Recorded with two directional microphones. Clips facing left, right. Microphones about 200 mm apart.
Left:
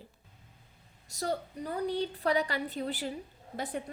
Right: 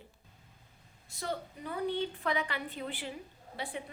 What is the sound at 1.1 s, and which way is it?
A woman's voice, 40° left (ahead or behind).